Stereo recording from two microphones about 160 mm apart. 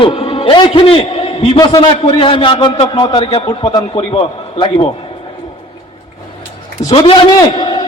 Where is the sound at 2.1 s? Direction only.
35° left (ahead or behind).